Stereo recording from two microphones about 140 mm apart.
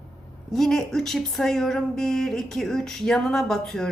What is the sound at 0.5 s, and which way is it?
A woman's voice, centre (ahead or behind).